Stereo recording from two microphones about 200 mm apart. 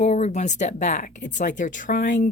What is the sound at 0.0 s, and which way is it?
Speech, 35° left (ahead or behind).